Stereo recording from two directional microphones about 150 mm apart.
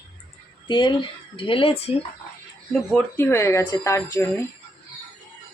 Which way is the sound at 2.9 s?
15° left (ahead or behind).